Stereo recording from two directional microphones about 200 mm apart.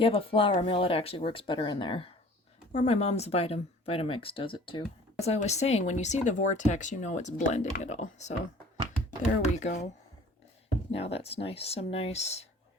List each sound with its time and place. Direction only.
0.0 s speech: 30° left (ahead or behind)
9.4 s speech: 35° left (ahead or behind)
10.9 s speech: 30° left (ahead or behind)